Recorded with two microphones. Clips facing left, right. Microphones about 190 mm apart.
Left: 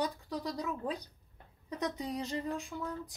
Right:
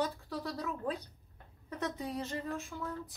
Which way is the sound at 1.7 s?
15° left (ahead or behind).